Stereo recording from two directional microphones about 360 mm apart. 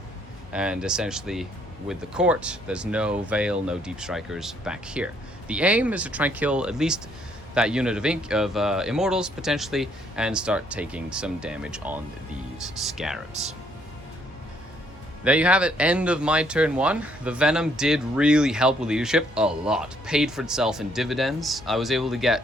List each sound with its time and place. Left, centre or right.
0.5 s speech: centre
15.2 s speech: centre